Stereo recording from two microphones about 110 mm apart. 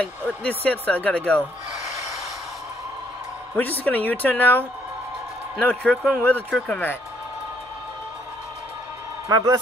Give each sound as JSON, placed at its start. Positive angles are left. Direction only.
{"t": 0.4, "sound": "a woman's voice", "side_deg": 15}
{"t": 3.5, "sound": "a woman's voice", "side_deg": 15}
{"t": 9.3, "sound": "a man's voice", "side_deg": -35}